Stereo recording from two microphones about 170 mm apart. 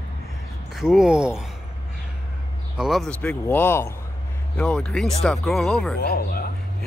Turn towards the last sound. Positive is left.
turn(degrees=60)  # may be behind; listen again after turning